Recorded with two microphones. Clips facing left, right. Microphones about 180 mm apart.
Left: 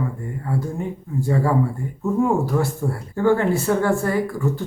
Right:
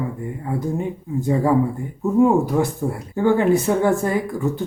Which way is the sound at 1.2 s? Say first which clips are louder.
Right 2 dB; 20° right (ahead or behind).